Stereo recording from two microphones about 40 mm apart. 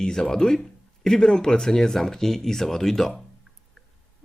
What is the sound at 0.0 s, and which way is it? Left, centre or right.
Speech, centre.